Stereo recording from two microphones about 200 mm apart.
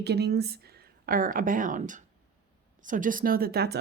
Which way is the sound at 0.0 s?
55° right (ahead or behind).